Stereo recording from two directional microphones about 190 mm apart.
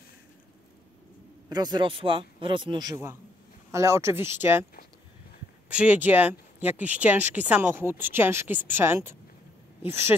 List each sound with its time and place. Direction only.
1.5 s speech: 20° right (ahead or behind)
5.7 s speech: 5° right (ahead or behind)